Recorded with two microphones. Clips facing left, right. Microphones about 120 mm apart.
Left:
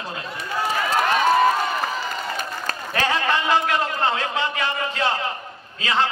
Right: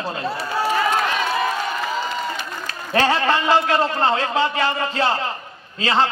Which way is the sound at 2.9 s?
30° right (ahead or behind).